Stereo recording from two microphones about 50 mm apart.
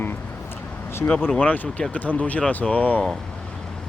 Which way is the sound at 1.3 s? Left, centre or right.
Left.